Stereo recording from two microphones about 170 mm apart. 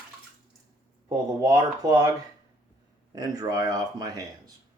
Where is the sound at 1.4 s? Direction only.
20° right (ahead or behind).